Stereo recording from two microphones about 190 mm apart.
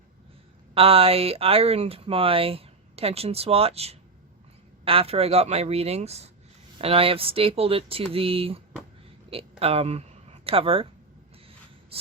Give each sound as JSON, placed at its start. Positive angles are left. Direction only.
{"t": 0.7, "sound": "speech", "side_deg": -30}